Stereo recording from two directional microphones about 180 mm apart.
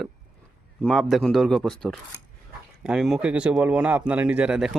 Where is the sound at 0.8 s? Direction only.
Centre (ahead or behind).